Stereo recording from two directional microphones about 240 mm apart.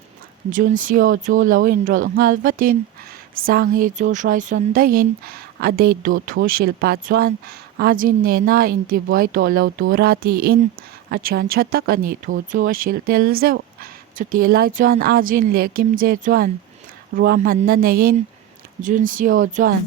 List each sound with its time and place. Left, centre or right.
0.5 s a woman's voice: right